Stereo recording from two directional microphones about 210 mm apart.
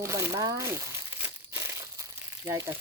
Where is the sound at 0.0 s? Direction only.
15° right (ahead or behind).